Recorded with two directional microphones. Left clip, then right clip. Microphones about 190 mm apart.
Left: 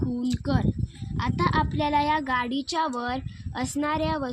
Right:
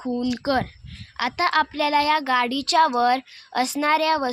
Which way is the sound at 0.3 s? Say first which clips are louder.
Right 6 dB; 35° right (ahead or behind).